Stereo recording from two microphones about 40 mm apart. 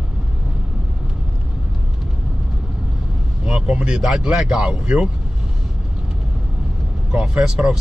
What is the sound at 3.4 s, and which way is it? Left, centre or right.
Vehicle, right.